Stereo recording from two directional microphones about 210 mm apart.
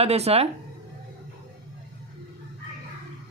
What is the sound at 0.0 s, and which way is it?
Speech, 30° right (ahead or behind).